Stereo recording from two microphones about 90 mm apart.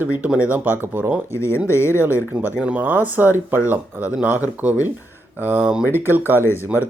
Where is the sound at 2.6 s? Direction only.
15° right (ahead or behind).